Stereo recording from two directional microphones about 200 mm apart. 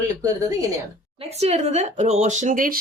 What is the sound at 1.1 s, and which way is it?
Speech, 30° right (ahead or behind).